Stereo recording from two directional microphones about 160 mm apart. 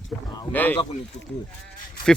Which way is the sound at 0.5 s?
10° left (ahead or behind).